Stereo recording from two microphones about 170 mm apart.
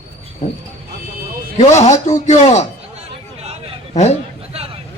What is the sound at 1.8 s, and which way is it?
Speech, 45° left (ahead or behind).